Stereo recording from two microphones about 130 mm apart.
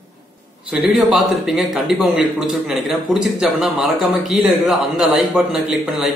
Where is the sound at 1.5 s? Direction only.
Centre (ahead or behind).